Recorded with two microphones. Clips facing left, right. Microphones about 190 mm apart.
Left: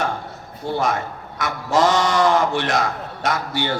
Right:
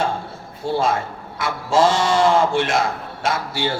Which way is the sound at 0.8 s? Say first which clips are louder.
Right 1 dB; 30° right (ahead or behind).